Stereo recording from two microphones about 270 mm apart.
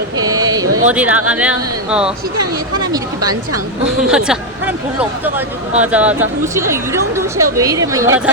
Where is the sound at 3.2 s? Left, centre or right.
Right.